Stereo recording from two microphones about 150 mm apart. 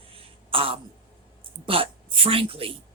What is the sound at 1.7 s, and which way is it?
Speech, 35° right (ahead or behind).